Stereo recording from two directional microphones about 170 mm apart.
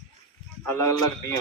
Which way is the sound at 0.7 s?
15° left (ahead or behind).